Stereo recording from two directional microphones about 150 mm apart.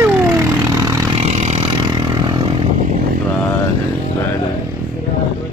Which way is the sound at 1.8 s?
30° right (ahead or behind).